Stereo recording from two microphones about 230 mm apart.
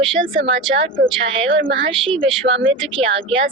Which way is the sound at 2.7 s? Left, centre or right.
Right.